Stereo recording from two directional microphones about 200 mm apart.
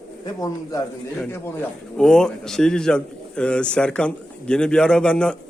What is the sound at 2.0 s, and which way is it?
A man's voice, 5° left (ahead or behind).